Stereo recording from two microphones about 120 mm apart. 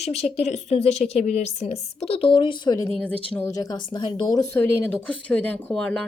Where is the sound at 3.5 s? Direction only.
30° left (ahead or behind).